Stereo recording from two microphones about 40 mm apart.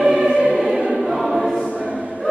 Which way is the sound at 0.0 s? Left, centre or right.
Centre.